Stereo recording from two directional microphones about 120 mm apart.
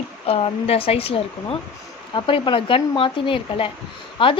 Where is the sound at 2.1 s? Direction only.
45° left (ahead or behind).